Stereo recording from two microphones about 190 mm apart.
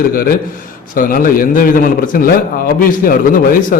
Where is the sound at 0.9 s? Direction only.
45° left (ahead or behind).